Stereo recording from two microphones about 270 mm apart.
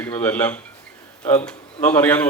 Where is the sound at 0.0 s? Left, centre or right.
Centre.